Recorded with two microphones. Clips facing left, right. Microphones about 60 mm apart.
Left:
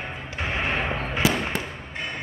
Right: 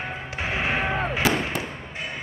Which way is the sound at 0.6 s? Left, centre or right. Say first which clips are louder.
Right 1 dB; centre.